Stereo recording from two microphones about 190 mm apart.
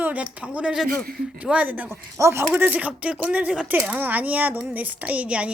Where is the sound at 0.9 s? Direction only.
50° right (ahead or behind).